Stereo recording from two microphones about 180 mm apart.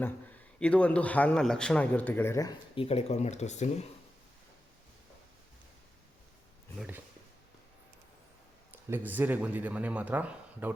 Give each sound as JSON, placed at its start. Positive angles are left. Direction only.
{"t": 0.6, "sound": "a man's voice", "side_deg": 5}
{"t": 2.7, "sound": "speech", "side_deg": 35}
{"t": 6.7, "sound": "a man's voice", "side_deg": -5}
{"t": 8.7, "sound": "a man's voice", "side_deg": -10}